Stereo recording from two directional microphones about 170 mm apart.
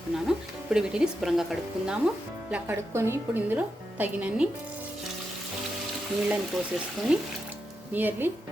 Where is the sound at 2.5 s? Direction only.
15° right (ahead or behind).